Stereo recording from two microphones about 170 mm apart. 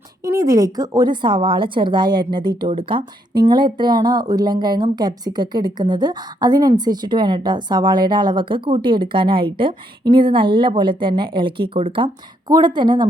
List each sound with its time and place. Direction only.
0.3 s a woman's voice: 20° right (ahead or behind)